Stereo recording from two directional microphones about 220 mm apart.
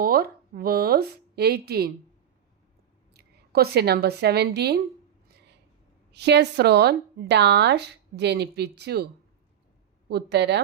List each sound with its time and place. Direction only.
0.0 s speech: 40° right (ahead or behind)
3.1 s a woman's voice: 45° right (ahead or behind)
6.1 s speech: 50° right (ahead or behind)
10.1 s speech: 50° right (ahead or behind)